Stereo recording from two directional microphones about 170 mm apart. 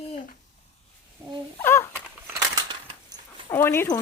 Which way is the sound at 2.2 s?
20° right (ahead or behind).